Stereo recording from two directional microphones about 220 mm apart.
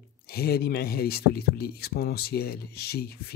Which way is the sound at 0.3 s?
45° left (ahead or behind).